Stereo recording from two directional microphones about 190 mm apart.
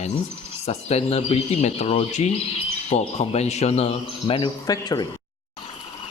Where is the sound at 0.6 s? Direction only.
35° left (ahead or behind).